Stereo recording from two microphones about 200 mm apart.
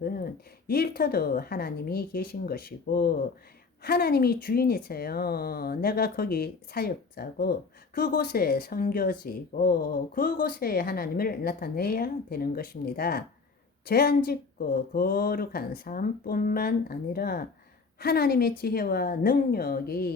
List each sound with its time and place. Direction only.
0.7 s speech: 50° left (ahead or behind)